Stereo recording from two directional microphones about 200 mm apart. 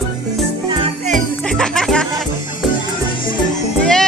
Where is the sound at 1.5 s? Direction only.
5° left (ahead or behind).